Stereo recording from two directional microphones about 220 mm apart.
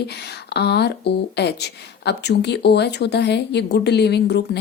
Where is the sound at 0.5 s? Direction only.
50° left (ahead or behind).